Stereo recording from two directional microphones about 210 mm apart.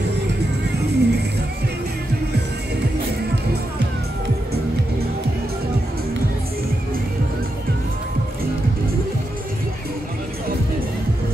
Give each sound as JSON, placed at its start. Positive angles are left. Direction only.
{"t": 0.7, "sound": "vehicle", "side_deg": -50}